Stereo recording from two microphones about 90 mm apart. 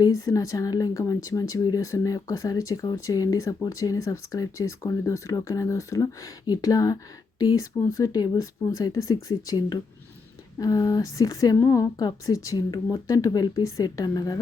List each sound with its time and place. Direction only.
0.0 s speech: 45° left (ahead or behind)
11.5 s speech: 30° left (ahead or behind)